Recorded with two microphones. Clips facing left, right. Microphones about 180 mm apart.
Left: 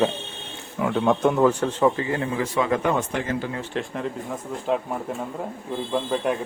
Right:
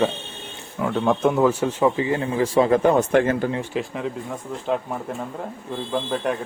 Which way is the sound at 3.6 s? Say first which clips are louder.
Right 2 dB; 5° right (ahead or behind).